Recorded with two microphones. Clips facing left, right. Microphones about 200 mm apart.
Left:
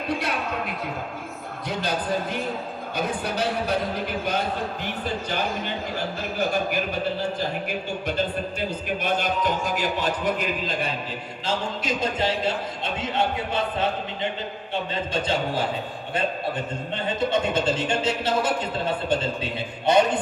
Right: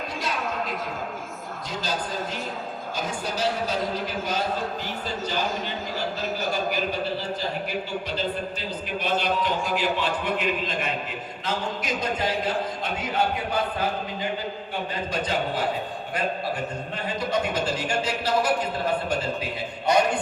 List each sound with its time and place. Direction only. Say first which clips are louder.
1.8 s a man's voice: left 4 dB; 60° left (ahead or behind)
9.0 s a man's voice: even; 50° left (ahead or behind); by 15.6 s 25° left (ahead or behind)
17.1 s a man's voice: left 3 dB; 25° left (ahead or behind)